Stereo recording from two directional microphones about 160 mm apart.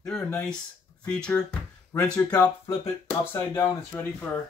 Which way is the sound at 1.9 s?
20° left (ahead or behind).